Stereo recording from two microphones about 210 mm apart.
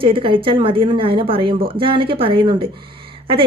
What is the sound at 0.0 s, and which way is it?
A woman's voice, 25° right (ahead or behind).